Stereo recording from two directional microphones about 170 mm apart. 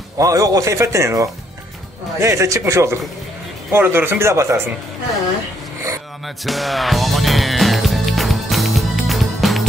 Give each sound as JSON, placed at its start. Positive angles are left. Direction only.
{"t": 0.2, "sound": "a man's voice", "side_deg": -20}
{"t": 6.2, "sound": "music", "side_deg": 0}